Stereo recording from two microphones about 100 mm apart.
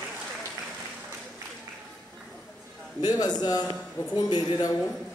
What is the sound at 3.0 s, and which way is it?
A man's voice, 40° left (ahead or behind).